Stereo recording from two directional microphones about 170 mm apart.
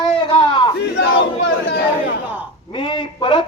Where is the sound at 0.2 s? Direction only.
30° left (ahead or behind).